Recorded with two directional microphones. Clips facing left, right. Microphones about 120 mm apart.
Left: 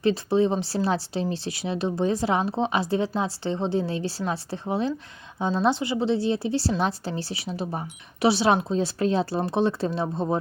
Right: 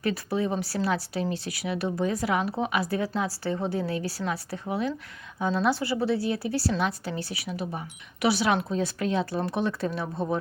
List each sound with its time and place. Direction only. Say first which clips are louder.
0.0 s a woman's voice: left 6 dB; 25° left (ahead or behind)